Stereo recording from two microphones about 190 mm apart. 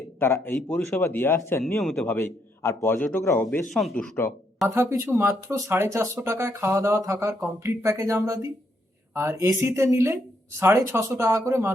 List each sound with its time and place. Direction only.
0.2 s a man's voice: 15° left (ahead or behind)
1.8 s a man's voice: 5° left (ahead or behind)
4.7 s speech: 15° right (ahead or behind)